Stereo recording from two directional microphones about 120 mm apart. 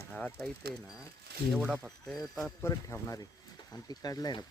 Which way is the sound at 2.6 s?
25° left (ahead or behind).